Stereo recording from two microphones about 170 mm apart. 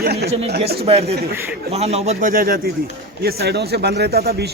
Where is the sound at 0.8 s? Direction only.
35° right (ahead or behind).